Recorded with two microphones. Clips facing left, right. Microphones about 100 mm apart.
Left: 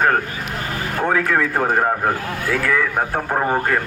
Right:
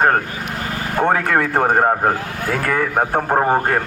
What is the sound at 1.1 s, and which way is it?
Speech, 60° right (ahead or behind).